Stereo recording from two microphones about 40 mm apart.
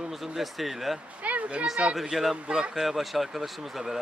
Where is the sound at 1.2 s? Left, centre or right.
Right.